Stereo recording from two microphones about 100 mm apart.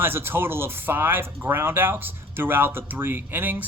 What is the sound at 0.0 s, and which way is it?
A man's voice, 20° right (ahead or behind).